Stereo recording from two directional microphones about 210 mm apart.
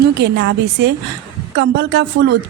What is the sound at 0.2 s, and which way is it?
A woman's voice, 55° right (ahead or behind).